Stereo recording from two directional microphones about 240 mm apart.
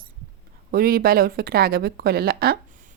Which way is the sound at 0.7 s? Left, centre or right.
Right.